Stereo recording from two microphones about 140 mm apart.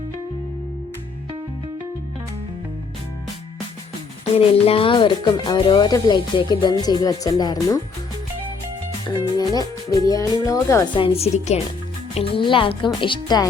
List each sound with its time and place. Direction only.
4.4 s speech: 45° left (ahead or behind); by 7.8 s 30° left (ahead or behind)
9.0 s music: 30° left (ahead or behind)
10.9 s a woman's voice: 40° left (ahead or behind)